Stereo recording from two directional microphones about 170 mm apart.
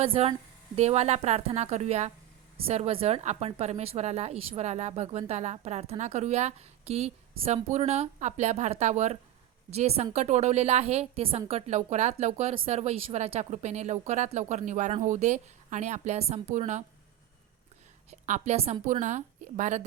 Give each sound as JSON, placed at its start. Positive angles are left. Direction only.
{"t": 0.0, "sound": "speech", "side_deg": -35}
{"t": 18.1, "sound": "speech", "side_deg": -45}